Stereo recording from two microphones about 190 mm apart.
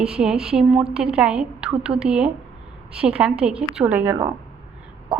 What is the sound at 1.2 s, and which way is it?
A woman's voice, 5° right (ahead or behind).